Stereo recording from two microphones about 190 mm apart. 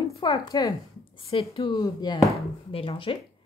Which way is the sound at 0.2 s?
20° left (ahead or behind).